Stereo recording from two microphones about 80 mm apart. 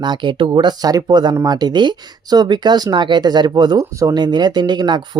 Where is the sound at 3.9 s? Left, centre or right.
Right.